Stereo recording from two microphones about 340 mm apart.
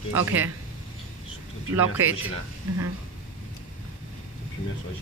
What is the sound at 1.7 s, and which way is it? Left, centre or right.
Speech, centre.